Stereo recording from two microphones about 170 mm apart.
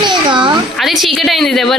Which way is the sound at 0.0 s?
25° right (ahead or behind).